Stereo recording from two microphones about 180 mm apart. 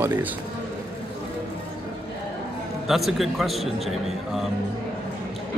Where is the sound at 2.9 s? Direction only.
Centre (ahead or behind).